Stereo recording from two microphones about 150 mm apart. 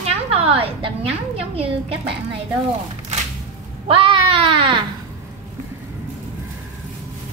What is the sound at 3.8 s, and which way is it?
Speech, 35° right (ahead or behind).